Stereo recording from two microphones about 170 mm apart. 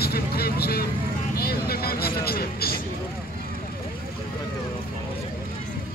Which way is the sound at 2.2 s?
65° left (ahead or behind).